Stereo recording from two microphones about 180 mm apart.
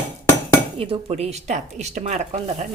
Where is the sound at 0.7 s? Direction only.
30° right (ahead or behind).